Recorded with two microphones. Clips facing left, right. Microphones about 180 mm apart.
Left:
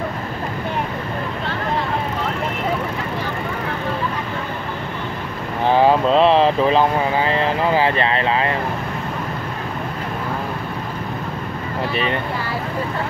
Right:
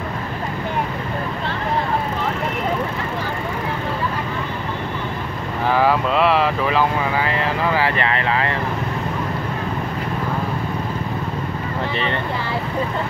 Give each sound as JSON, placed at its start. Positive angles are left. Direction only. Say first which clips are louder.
{"t": 5.7, "sound": "speech", "louder": "left 3 dB", "side_deg": 25}